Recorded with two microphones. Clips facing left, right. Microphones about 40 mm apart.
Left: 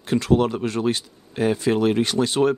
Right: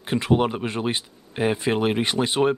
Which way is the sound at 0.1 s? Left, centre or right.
Right.